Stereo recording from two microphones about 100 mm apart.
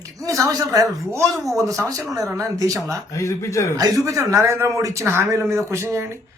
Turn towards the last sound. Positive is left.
turn(degrees=-30)  # may be behind; listen again after turning